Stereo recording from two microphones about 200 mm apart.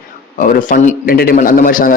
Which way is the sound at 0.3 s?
40° left (ahead or behind).